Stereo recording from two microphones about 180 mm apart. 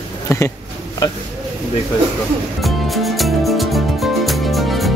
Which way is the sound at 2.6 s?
Centre (ahead or behind).